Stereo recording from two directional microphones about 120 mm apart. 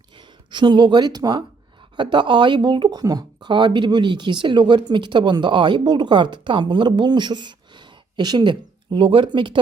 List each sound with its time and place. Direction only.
0.2 s speech: 40° right (ahead or behind)